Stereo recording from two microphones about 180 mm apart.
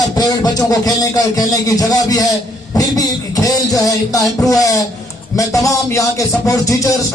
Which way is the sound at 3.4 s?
20° left (ahead or behind).